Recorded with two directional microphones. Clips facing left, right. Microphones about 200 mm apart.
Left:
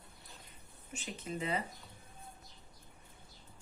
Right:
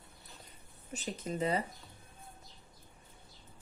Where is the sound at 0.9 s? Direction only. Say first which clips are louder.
Right 3 dB; 35° right (ahead or behind).